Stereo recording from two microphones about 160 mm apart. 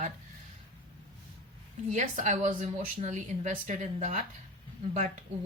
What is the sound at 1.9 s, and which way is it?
Speech, 50° right (ahead or behind).